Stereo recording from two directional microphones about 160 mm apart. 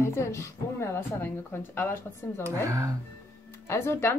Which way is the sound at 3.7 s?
15° left (ahead or behind).